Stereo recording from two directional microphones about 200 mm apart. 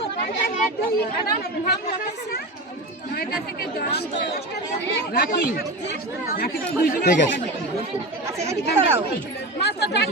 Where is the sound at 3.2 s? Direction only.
50° left (ahead or behind).